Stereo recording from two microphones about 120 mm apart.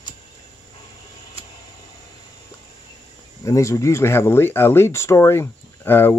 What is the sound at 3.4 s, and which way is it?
Speech, 25° left (ahead or behind).